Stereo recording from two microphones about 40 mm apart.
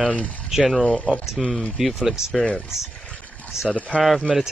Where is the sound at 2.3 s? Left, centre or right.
Left.